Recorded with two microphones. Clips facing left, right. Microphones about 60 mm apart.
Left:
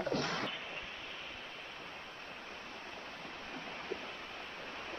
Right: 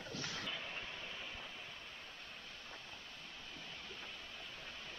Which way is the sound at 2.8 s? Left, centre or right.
Left.